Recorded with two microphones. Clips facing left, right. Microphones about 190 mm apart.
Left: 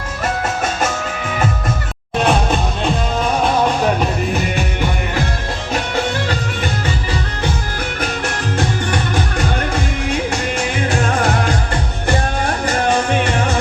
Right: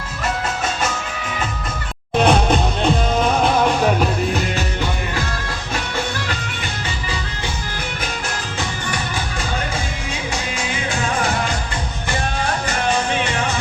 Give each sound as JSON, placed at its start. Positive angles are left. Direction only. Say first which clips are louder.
{"t": 2.2, "sound": "music", "louder": "right 1 dB", "side_deg": 0}
{"t": 12.9, "sound": "music", "louder": "left 3 dB", "side_deg": 55}